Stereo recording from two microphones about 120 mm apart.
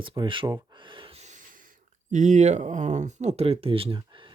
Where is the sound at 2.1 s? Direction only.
90° right.